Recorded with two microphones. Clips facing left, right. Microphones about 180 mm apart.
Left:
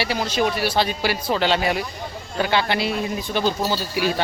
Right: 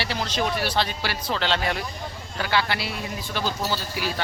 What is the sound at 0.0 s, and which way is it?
Speech, 10° left (ahead or behind).